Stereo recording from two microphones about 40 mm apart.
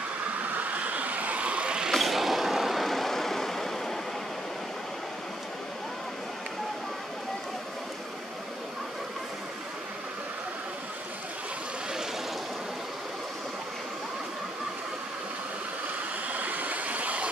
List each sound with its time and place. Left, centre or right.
0.4 s a sound: right
1.4 s vehicle: right
1.9 s vehicle: centre
16.3 s vehicle: right